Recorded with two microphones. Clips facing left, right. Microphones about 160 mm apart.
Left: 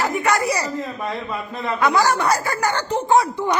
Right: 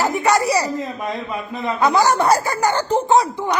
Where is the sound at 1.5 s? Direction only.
20° right (ahead or behind).